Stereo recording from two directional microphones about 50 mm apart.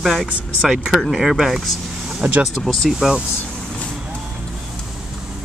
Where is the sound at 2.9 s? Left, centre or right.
Centre.